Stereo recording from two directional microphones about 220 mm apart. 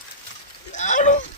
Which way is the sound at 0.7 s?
35° left (ahead or behind).